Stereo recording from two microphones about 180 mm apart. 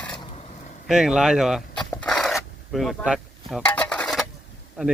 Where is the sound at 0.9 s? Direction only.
5° right (ahead or behind).